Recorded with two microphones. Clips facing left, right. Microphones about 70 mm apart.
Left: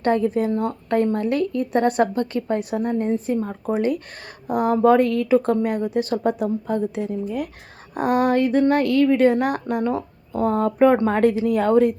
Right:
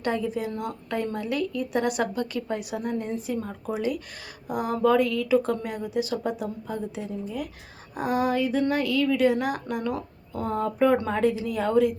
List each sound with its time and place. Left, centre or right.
0.0 s a woman's voice: left